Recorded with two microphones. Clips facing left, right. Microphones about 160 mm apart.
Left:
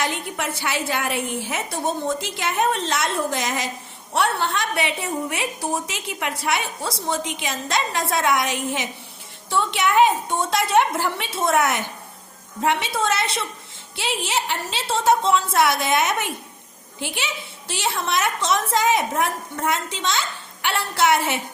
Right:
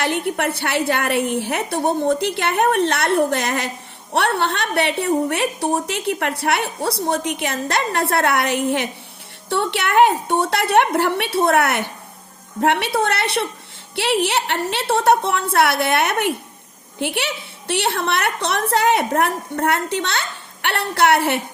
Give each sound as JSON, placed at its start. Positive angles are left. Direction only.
{"t": 0.0, "sound": "a woman's voice", "side_deg": -60}